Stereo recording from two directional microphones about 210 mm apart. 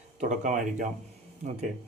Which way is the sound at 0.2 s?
35° right (ahead or behind).